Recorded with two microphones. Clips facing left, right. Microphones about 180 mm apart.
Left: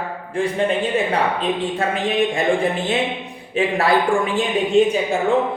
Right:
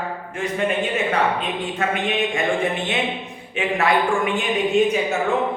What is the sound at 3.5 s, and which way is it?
Speech, 35° left (ahead or behind).